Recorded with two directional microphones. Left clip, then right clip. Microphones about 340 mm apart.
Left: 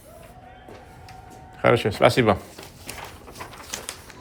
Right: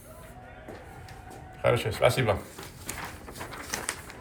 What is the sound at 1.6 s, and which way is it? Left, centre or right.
Speech, left.